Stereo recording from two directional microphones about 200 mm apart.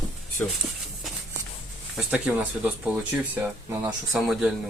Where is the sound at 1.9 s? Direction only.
5° right (ahead or behind).